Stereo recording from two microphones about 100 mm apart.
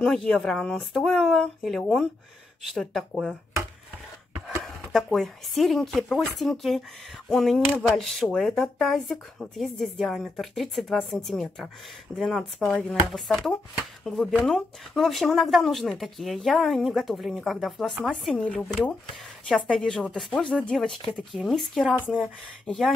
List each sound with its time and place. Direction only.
0.0 s speech: 5° left (ahead or behind)
4.6 s speech: centre (ahead or behind)
18.3 s a woman's voice: 10° left (ahead or behind)